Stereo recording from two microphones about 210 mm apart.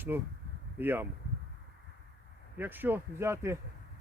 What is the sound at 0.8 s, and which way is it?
Speech, 10° right (ahead or behind).